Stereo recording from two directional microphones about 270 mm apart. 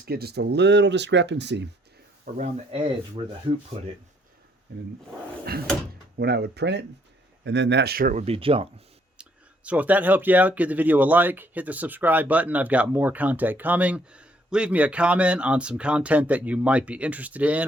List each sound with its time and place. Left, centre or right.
0.0 s speech: right
2.3 s speech: right
3.7 s speech: right
6.1 s speech: right
9.2 s a sound: centre
9.6 s speech: centre